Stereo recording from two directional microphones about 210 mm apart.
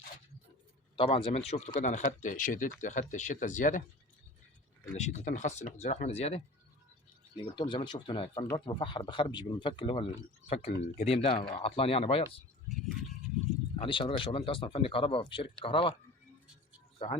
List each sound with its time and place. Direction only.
0.9 s speech: 25° left (ahead or behind)
4.9 s speech: 35° left (ahead or behind)
7.4 s speech: 20° left (ahead or behind)
13.7 s speech: 25° left (ahead or behind)